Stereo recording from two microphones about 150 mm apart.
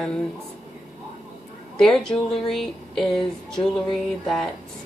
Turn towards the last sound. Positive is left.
turn(degrees=0)  # may be behind; listen again after turning